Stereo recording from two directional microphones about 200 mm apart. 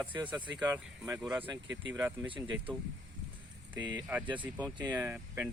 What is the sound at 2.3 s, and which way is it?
Speech, 25° right (ahead or behind).